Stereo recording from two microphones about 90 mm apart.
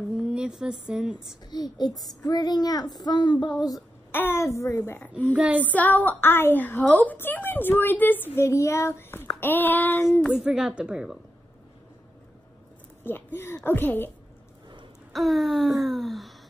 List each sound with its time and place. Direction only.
0.2 s a woman's voice: 10° right (ahead or behind)
1.5 s a woman's voice: 50° left (ahead or behind)
4.1 s a woman's voice: 25° left (ahead or behind)
5.3 s a woman's voice: 15° right (ahead or behind)
5.7 s a woman's voice: 20° left (ahead or behind)
10.3 s a woman's voice: 5° right (ahead or behind)
13.0 s a woman's voice: 25° left (ahead or behind)
15.1 s a sound: centre (ahead or behind)